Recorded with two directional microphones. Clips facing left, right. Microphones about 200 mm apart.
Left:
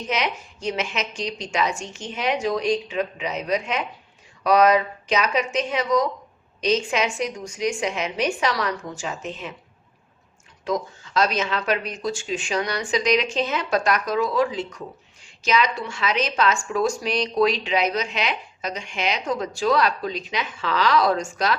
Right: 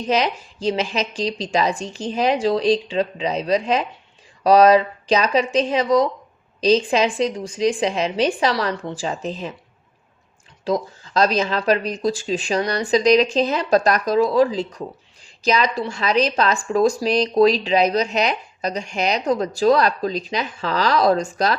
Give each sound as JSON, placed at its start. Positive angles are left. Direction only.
{"t": 0.1, "sound": "speech", "side_deg": -30}
{"t": 10.6, "sound": "speech", "side_deg": -30}